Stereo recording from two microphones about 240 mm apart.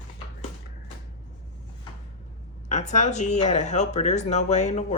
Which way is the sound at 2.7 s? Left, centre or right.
Left.